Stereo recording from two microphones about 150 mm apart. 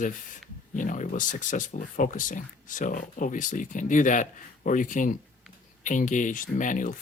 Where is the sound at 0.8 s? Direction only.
60° left (ahead or behind).